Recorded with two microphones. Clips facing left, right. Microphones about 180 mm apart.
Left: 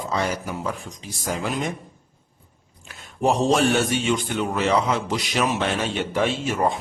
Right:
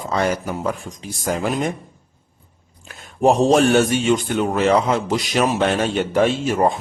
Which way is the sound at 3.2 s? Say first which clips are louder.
Right 5 dB; 50° right (ahead or behind).